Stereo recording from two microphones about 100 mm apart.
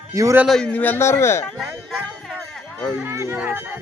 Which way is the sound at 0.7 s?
15° left (ahead or behind).